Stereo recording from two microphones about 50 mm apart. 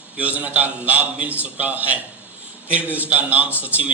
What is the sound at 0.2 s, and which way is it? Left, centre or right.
A man's voice, right.